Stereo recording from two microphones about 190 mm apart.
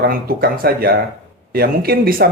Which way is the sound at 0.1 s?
50° right (ahead or behind).